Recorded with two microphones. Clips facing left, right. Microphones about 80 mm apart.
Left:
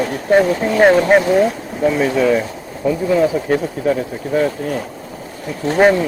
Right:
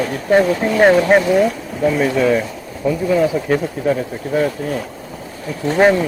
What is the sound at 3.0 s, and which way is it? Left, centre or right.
Speech, centre.